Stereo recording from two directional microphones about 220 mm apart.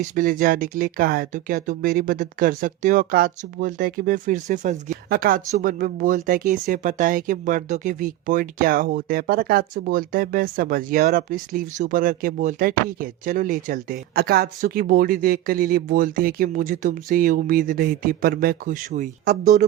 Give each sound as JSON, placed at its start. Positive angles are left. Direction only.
{"t": 0.1, "sound": "speech", "side_deg": -35}